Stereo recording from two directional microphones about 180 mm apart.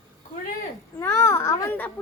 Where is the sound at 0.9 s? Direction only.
15° left (ahead or behind).